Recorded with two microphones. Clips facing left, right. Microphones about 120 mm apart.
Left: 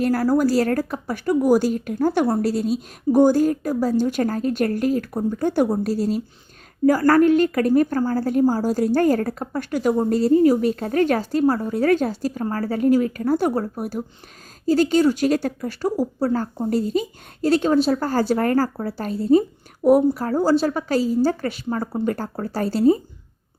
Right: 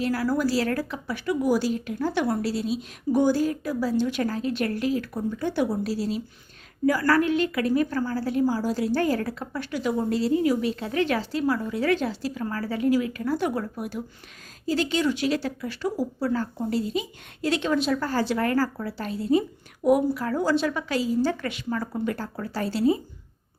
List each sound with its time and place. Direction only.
0.0 s a woman's voice: 45° left (ahead or behind)